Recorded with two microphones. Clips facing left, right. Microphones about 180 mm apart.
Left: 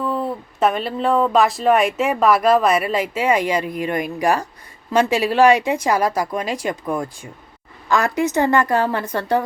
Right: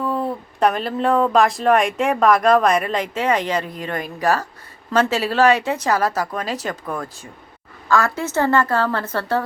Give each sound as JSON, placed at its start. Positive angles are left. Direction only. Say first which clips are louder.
{"t": 0.0, "sound": "speech", "louder": "even", "side_deg": 0}